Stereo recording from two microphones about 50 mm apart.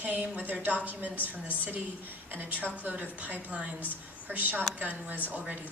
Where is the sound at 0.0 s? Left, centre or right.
Right.